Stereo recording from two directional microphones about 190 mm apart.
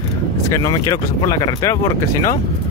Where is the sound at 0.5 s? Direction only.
20° left (ahead or behind).